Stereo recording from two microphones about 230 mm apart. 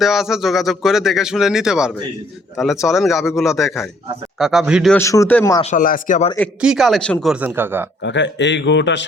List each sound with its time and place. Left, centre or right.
0.0 s speech: centre
4.9 s a man's voice: centre
5.7 s speech: left
6.6 s speech: centre
8.0 s speech: left